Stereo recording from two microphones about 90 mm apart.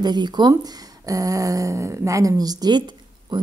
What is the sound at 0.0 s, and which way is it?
Speech, 50° right (ahead or behind).